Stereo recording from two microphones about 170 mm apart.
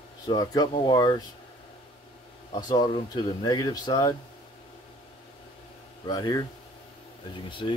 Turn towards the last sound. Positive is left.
turn(degrees=30)  # may be behind; listen again after turning